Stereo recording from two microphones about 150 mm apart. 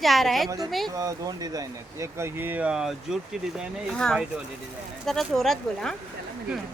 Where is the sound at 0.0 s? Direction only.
Centre (ahead or behind).